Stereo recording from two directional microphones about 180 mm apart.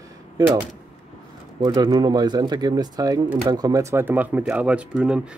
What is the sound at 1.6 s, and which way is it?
Speech, 25° right (ahead or behind).